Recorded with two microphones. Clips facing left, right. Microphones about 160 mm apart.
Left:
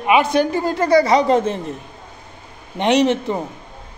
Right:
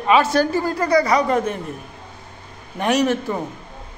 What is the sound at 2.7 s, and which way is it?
Speech, 25° left (ahead or behind).